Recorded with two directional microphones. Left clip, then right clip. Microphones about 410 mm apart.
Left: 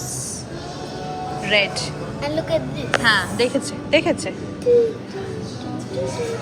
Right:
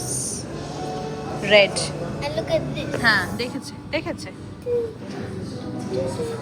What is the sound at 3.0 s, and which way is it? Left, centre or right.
Speech, centre.